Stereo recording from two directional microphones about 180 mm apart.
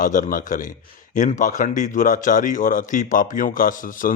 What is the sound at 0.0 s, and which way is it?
A man's voice, 50° left (ahead or behind).